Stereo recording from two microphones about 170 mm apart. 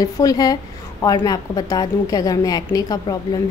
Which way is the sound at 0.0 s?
20° left (ahead or behind).